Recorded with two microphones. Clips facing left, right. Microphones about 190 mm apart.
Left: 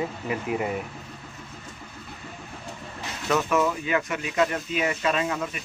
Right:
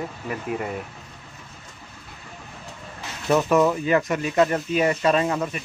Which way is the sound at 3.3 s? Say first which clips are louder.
Right 5 dB; 35° right (ahead or behind).